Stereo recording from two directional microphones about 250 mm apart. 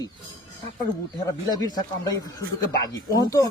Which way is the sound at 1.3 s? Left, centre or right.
Centre.